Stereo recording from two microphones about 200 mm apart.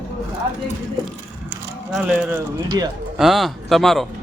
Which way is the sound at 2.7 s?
20° right (ahead or behind).